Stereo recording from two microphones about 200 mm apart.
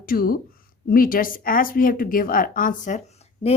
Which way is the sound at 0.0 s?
45° left (ahead or behind).